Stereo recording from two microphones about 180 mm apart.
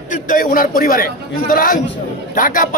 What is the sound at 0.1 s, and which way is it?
A man's voice, 50° left (ahead or behind).